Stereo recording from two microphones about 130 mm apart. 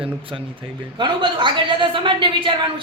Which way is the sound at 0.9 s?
40° right (ahead or behind).